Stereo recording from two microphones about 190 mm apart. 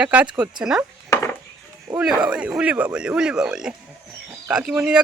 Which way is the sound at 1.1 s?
15° left (ahead or behind).